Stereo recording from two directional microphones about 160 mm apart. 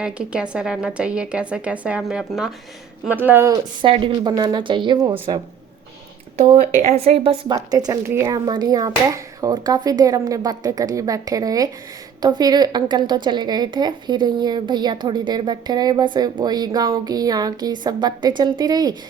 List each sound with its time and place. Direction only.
0.0 s speech: 5° right (ahead or behind); by 5.4 s 35° right (ahead or behind)
6.8 s speech: 40° right (ahead or behind)
7.4 s speech: 25° right (ahead or behind)